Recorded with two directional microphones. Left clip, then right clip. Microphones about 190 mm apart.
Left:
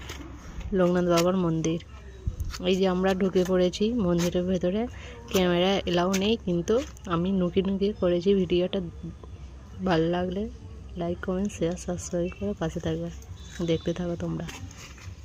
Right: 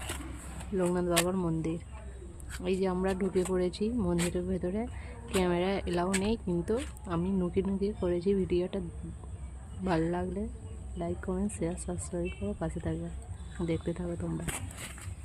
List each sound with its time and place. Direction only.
0.8 s speech: 20° left (ahead or behind)
9.8 s speech: 15° left (ahead or behind)